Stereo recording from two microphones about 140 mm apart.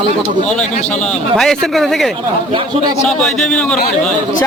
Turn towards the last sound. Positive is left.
turn(degrees=5)  # may be behind; listen again after turning